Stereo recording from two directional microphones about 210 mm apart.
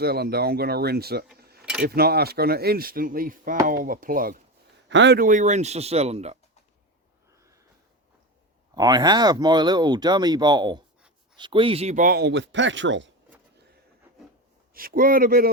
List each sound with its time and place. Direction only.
0.0 s speech: 50° right (ahead or behind)
1.4 s keys jangling: 50° right (ahead or behind)
1.9 s speech: 45° right (ahead or behind)
4.9 s a man's voice: 55° right (ahead or behind); by 6.3 s 30° right (ahead or behind)
8.7 s speech: 20° right (ahead or behind); by 13.1 s 60° right (ahead or behind)
14.7 s speech: 45° right (ahead or behind)